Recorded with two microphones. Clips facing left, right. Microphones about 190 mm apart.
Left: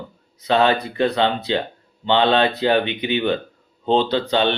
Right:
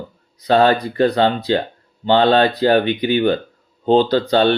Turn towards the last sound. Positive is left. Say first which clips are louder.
# right 5 dB
turn(degrees=-40)  # may be behind; listen again after turning